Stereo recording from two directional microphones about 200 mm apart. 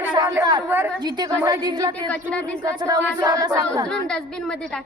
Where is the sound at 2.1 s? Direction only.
5° left (ahead or behind).